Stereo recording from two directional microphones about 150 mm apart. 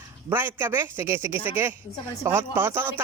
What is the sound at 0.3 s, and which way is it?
A man's voice, 15° right (ahead or behind).